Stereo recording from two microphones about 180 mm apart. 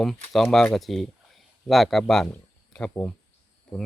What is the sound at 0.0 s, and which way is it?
Speech, centre (ahead or behind).